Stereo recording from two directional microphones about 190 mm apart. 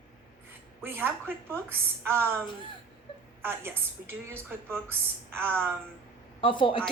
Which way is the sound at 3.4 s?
10° right (ahead or behind).